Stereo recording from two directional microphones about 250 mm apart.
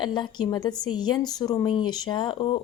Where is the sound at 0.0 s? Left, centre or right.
Centre.